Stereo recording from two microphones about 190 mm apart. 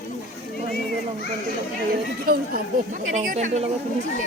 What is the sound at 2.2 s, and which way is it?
Speech, 55° right (ahead or behind).